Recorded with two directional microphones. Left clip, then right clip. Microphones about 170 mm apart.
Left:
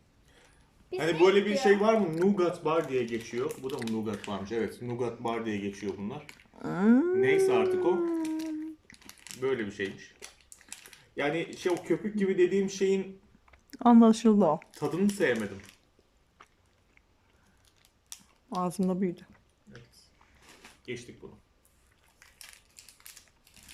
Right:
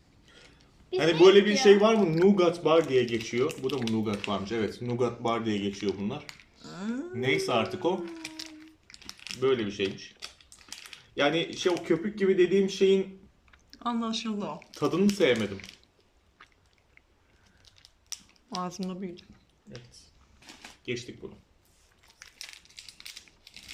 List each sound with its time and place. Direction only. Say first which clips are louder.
0.9 s speech: right 5 dB; 5° right (ahead or behind)
5.7 s speech: right 5 dB; 25° right (ahead or behind)
6.6 s speech: left 12 dB; 50° left (ahead or behind)
7.2 s speech: right 3 dB; 10° right (ahead or behind)
8.9 s a sound: right 7 dB; 5° right (ahead or behind)
10.7 s speech: right 5 dB; centre (ahead or behind)
13.7 s speech: left 10 dB; 40° left (ahead or behind)
14.7 s speech: right 4 dB; 5° right (ahead or behind)
18.1 s scissors: right 7 dB; centre (ahead or behind)
18.6 s speech: left 8 dB; 25° left (ahead or behind)
21.2 s speech: right 5 dB; 10° right (ahead or behind)
22.2 s crushing: right 7 dB; 15° right (ahead or behind)